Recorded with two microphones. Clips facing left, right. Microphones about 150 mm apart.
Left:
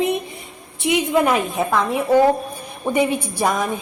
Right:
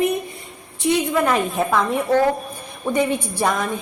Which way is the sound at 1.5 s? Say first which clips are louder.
Even; centre (ahead or behind).